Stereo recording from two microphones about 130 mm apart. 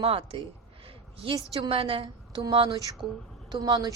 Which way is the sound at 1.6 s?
45° right (ahead or behind).